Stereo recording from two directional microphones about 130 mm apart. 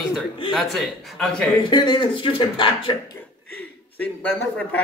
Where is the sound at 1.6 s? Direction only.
35° left (ahead or behind).